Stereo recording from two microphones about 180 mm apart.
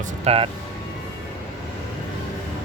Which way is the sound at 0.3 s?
30° right (ahead or behind).